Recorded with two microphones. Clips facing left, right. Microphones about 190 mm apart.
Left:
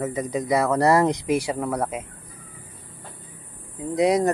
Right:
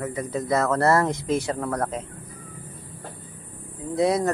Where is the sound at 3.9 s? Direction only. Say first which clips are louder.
Left 2 dB; 15° left (ahead or behind).